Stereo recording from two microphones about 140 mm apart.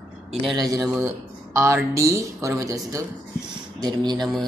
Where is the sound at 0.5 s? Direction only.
30° right (ahead or behind).